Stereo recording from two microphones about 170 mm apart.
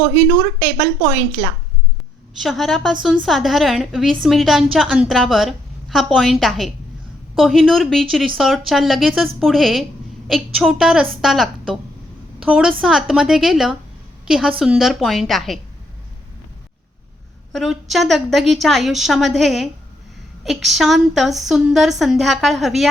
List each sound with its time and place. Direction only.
0.0 s speech: 40° right (ahead or behind)
2.4 s a woman's voice: centre (ahead or behind)
12.8 s a woman's voice: centre (ahead or behind)
17.5 s a woman's voice: centre (ahead or behind)